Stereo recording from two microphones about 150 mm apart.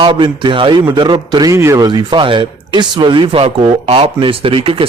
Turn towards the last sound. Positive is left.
turn(degrees=-40)  # may be behind; listen again after turning